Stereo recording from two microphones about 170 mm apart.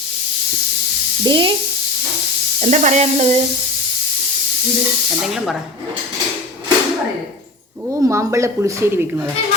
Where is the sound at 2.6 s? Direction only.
45° right (ahead or behind).